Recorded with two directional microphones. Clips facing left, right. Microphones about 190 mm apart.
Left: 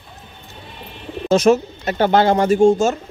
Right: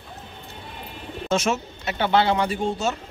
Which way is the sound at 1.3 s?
35° left (ahead or behind).